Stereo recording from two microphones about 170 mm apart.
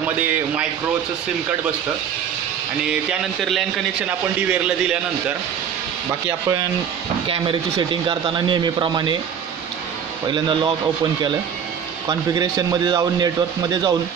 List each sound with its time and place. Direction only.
0.0 s a man's voice: 10° right (ahead or behind)
2.9 s a man's voice: centre (ahead or behind)
7.2 s a man's voice: 30° right (ahead or behind)
10.2 s a man's voice: 25° right (ahead or behind)
12.1 s a man's voice: 20° right (ahead or behind)